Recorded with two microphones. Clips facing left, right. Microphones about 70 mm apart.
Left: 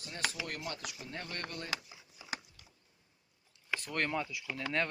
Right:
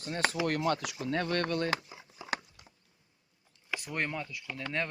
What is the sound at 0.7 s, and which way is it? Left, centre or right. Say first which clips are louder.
Speech: right 12 dB; right.